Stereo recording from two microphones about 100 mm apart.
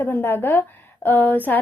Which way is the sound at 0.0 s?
20° left (ahead or behind).